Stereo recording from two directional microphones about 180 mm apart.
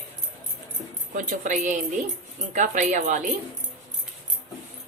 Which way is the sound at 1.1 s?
45° right (ahead or behind).